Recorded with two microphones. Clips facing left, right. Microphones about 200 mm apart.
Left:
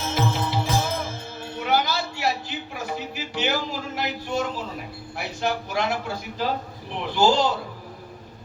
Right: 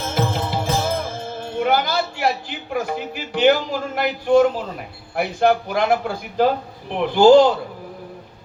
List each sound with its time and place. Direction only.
0.1 s music: 50° right (ahead or behind)
1.5 s a sound: 55° right (ahead or behind)
5.1 s a man's voice: 55° right (ahead or behind)